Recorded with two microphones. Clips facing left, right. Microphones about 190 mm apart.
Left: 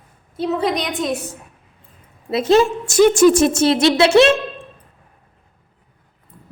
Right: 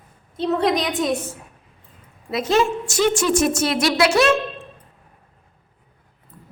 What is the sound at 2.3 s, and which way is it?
Speech, 30° left (ahead or behind).